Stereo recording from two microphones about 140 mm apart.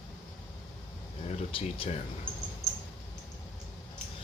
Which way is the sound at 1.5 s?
40° left (ahead or behind).